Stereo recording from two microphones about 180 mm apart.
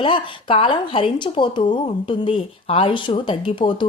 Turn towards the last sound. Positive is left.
turn(degrees=25)  # may be behind; listen again after turning